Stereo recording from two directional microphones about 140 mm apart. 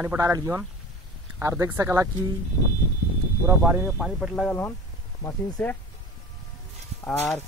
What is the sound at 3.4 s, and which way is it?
Speech, 15° right (ahead or behind).